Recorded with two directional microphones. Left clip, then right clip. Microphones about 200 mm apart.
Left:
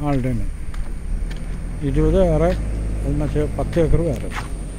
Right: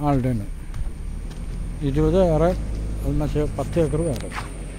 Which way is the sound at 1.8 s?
15° right (ahead or behind).